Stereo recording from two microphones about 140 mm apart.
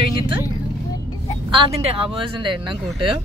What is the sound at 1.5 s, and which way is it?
Speech, 35° right (ahead or behind).